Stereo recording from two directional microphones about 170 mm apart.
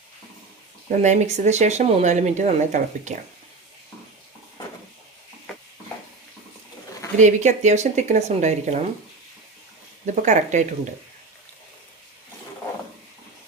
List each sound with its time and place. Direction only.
0.9 s speech: 45° right (ahead or behind)
7.2 s speech: 45° right (ahead or behind)
10.1 s speech: 45° right (ahead or behind)